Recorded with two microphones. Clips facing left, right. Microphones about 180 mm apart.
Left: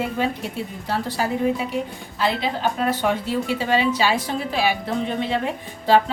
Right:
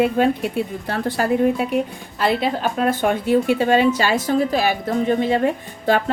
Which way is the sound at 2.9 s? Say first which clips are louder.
Right 5 dB; 50° right (ahead or behind).